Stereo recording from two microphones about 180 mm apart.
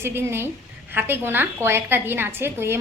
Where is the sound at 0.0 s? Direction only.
15° right (ahead or behind).